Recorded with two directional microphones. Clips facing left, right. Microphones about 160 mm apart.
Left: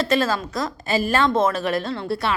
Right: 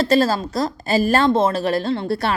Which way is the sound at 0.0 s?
35° right (ahead or behind).